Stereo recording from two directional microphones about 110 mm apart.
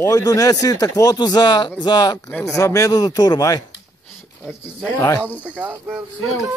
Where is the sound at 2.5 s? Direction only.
30° left (ahead or behind).